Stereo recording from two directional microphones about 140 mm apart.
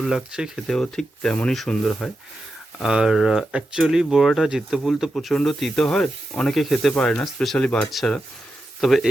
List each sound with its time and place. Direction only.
0.0 s speech: centre (ahead or behind)